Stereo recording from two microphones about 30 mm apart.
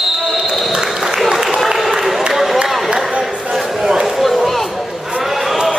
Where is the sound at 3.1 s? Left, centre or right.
Right.